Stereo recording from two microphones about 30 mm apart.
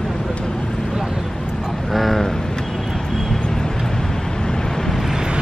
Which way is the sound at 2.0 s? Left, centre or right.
Centre.